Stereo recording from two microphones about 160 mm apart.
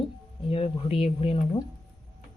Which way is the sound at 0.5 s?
35° left (ahead or behind).